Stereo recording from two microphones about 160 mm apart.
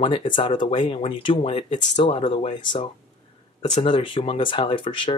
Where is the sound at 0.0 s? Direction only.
30° left (ahead or behind).